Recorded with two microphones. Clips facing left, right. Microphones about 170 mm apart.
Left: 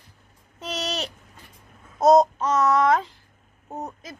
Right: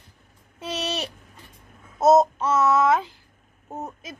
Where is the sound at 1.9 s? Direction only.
5° right (ahead or behind).